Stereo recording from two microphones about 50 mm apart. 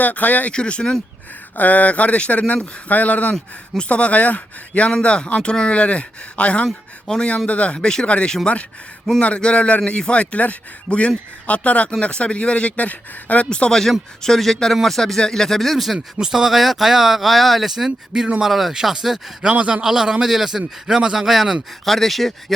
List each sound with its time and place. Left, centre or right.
0.0 s speech: left
0.5 s speech: centre
1.5 s speech: left
13.7 s speech: centre
16.1 s a man's voice: centre
19.5 s a man's voice: right; by 22.5 s centre